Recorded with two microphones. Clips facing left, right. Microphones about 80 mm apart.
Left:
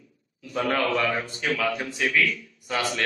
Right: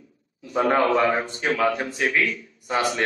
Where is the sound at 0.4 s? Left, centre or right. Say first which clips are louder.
Right 5 dB; right.